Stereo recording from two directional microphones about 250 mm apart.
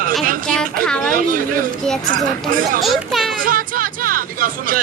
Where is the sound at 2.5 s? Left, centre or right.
Right.